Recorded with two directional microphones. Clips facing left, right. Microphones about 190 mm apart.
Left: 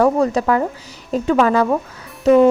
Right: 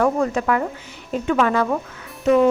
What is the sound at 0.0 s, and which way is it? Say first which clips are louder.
A woman's voice: left 4 dB; 35° left (ahead or behind).